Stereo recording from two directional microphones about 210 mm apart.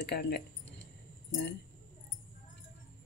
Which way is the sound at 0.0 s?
50° left (ahead or behind).